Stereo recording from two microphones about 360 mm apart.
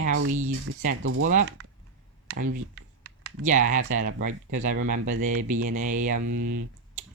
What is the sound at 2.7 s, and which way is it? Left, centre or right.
Typing, right.